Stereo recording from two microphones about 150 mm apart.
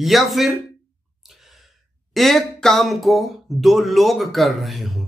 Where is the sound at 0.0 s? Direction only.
Centre (ahead or behind).